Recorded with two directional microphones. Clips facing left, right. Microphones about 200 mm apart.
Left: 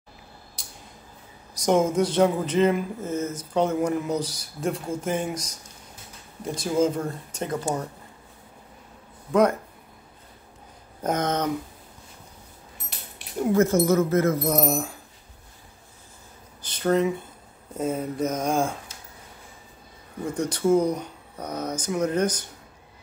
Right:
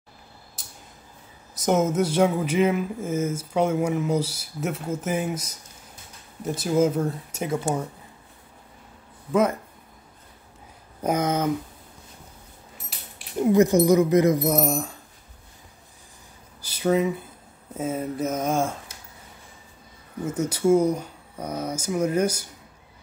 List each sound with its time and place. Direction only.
0.6 s a sound: centre (ahead or behind)
1.5 s speech: 5° right (ahead or behind)
6.4 s speech: 5° right (ahead or behind)
9.3 s speech: 5° right (ahead or behind)
11.0 s speech: 10° right (ahead or behind)
13.5 s speech: 15° right (ahead or behind)
14.6 s speech: centre (ahead or behind)
16.6 s speech: 5° right (ahead or behind)
20.2 s speech: 5° right (ahead or behind)